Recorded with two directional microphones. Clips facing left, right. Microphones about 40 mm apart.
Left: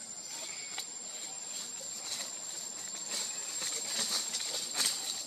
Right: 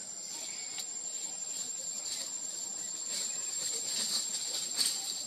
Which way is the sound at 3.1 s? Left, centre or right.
Left.